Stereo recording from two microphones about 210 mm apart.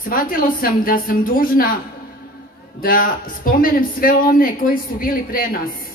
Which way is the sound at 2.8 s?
45° left (ahead or behind).